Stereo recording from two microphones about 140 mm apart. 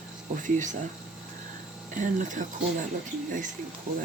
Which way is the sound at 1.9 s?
65° right (ahead or behind).